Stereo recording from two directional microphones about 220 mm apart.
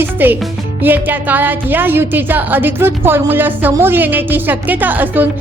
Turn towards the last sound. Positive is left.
turn(degrees=-10)  # may be behind; listen again after turning